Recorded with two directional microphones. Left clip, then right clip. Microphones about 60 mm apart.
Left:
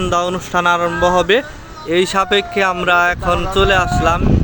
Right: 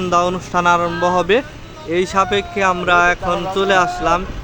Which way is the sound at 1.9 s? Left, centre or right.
Left.